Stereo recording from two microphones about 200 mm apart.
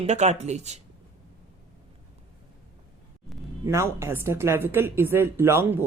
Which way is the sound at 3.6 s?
15° right (ahead or behind).